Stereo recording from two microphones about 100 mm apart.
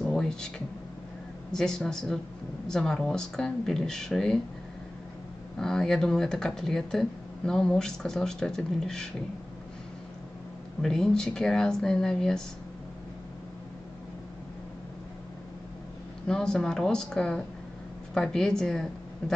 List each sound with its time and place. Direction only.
0.0 s a sound: 5° left (ahead or behind)
1.5 s speech: 5° left (ahead or behind)
5.6 s speech: 5° left (ahead or behind)
10.8 s speech: 5° left (ahead or behind)
16.3 s a woman's voice: 5° left (ahead or behind)